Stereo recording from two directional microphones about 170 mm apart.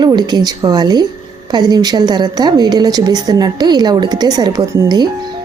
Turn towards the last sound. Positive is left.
turn(degrees=-20)  # may be behind; listen again after turning